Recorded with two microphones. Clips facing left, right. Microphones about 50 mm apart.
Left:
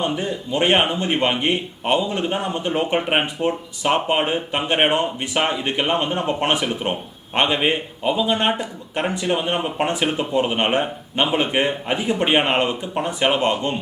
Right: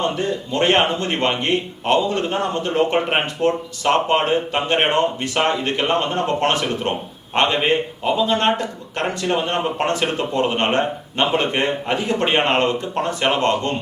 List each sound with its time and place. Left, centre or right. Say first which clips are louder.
0.0 s speech: right 2 dB; centre